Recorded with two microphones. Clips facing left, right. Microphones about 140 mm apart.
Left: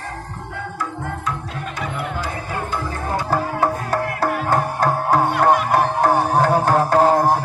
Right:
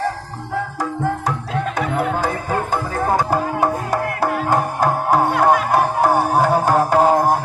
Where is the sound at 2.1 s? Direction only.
45° right (ahead or behind).